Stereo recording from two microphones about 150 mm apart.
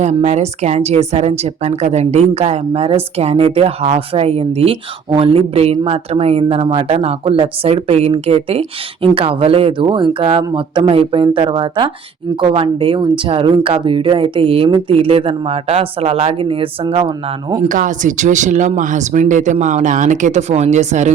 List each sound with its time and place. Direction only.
0.0 s a woman's voice: 50° right (ahead or behind)
17.7 s speech: 60° right (ahead or behind)